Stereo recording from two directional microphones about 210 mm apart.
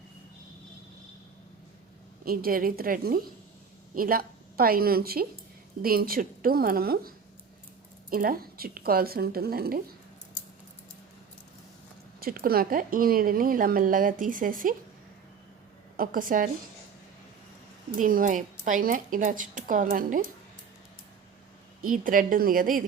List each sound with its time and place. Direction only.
2.2 s a woman's voice: 45° right (ahead or behind)
8.1 s speech: 45° right (ahead or behind)
12.2 s speech: 45° right (ahead or behind)
16.0 s speech: 40° right (ahead or behind)
17.9 s speech: 40° right (ahead or behind)
21.8 s speech: 40° right (ahead or behind)